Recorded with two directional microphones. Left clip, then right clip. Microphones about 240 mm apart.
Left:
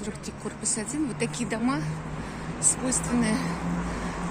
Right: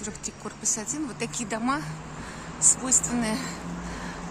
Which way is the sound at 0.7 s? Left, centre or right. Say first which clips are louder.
Left 2 dB; centre.